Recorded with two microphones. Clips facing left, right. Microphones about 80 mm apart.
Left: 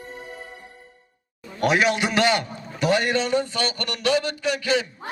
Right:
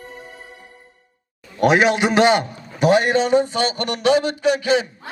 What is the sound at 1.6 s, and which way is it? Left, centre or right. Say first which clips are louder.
A man's voice: right 5 dB; right.